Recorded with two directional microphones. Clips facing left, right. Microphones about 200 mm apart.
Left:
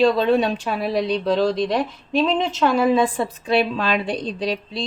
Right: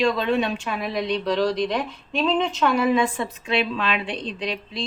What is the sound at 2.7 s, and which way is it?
Speech, 30° left (ahead or behind).